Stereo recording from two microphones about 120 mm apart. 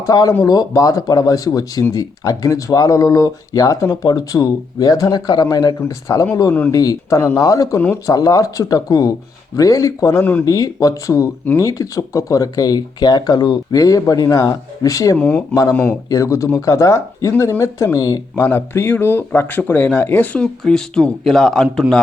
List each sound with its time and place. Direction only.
0.0 s speech: 30° left (ahead or behind)
10.4 s speech: 30° left (ahead or behind)
15.2 s speech: 10° left (ahead or behind)
16.0 s speech: 25° left (ahead or behind); by 22.0 s 5° left (ahead or behind)